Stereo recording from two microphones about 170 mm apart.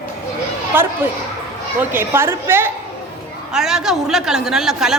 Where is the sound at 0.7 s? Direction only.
10° right (ahead or behind).